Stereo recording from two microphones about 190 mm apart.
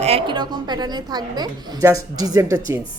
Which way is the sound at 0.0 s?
30° right (ahead or behind).